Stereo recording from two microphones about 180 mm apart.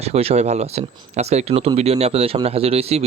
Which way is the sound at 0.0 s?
35° right (ahead or behind).